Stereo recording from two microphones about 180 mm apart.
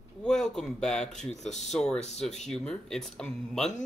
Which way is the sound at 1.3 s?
40° left (ahead or behind).